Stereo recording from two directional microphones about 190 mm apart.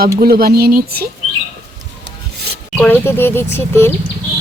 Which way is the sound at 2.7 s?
10° left (ahead or behind).